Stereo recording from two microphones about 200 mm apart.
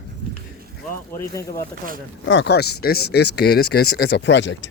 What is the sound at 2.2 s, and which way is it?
Speech, 65° left (ahead or behind).